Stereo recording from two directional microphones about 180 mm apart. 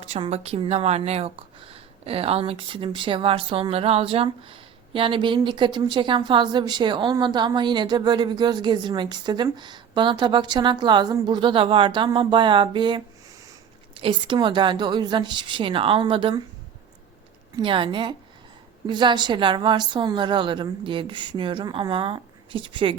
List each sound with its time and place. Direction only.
0.0 s a woman's voice: 35° right (ahead or behind)
17.6 s a woman's voice: 30° right (ahead or behind)